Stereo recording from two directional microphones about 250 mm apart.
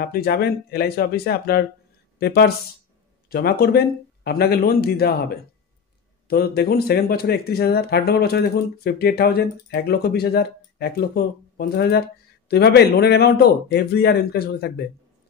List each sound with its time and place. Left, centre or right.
0.0 s speech: left